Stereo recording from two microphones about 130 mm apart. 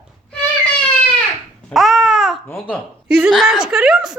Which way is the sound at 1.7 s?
Centre (ahead or behind).